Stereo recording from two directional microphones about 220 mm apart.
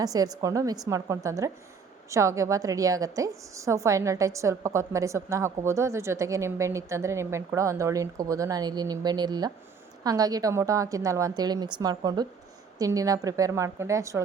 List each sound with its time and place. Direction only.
0.0 s a woman's voice: 15° right (ahead or behind)